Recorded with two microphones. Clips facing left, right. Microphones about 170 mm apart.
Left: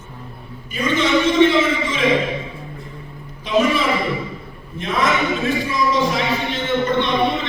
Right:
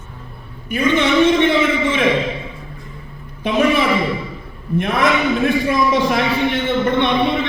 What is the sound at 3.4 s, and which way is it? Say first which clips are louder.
A man's voice: right 2 dB; 60° right (ahead or behind).